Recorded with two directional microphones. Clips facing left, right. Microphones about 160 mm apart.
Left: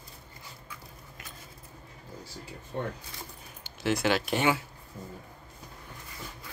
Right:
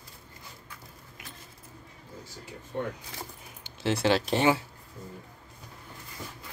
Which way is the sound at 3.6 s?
30° right (ahead or behind).